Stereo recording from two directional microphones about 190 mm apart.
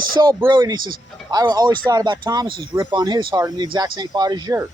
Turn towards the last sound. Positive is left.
turn(degrees=-20)  # may be behind; listen again after turning